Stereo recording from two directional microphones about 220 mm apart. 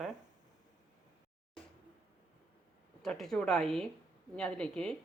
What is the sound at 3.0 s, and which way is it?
Speech, centre (ahead or behind).